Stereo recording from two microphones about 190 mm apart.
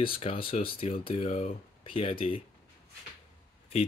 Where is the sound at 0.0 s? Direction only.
30° left (ahead or behind).